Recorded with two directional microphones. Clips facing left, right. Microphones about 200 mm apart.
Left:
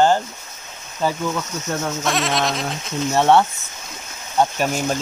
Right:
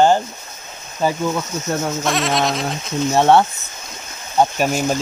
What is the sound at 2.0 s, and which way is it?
Speech, centre (ahead or behind).